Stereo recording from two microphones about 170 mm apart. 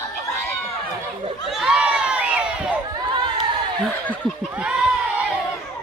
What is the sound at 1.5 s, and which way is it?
Crowd, centre (ahead or behind).